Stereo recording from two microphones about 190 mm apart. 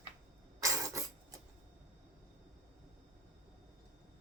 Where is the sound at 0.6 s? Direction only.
15° right (ahead or behind).